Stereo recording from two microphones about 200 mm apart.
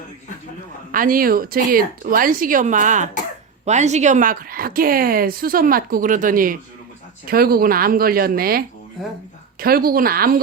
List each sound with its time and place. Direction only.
0.9 s speech: 45° right (ahead or behind)